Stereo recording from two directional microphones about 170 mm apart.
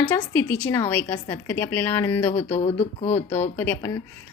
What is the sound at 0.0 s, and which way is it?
A woman's voice, 10° left (ahead or behind).